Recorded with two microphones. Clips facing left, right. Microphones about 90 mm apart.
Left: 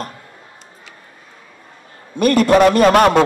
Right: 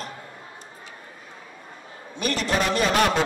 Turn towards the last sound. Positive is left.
turn(degrees=50)  # may be behind; listen again after turning